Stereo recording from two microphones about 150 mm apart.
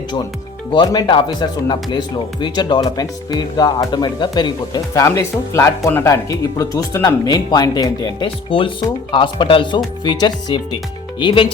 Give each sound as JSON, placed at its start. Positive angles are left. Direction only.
{"t": 0.7, "sound": "speech", "side_deg": 30}